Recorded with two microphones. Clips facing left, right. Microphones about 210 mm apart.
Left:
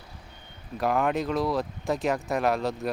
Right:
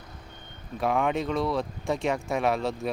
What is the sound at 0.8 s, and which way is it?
Speech, centre (ahead or behind).